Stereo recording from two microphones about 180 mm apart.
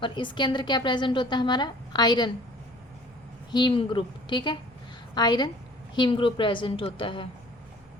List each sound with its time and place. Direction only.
0.0 s a woman's voice: 25° left (ahead or behind)
3.5 s a woman's voice: 25° left (ahead or behind)